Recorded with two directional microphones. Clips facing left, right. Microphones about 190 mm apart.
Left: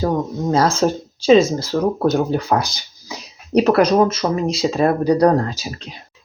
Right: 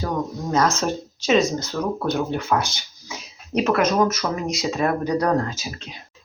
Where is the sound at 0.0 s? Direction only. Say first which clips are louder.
Left 6 dB; 30° left (ahead or behind).